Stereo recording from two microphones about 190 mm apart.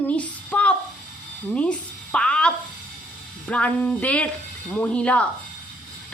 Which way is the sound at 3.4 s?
5° left (ahead or behind).